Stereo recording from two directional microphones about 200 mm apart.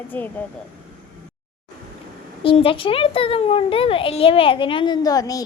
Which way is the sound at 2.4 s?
25° left (ahead or behind).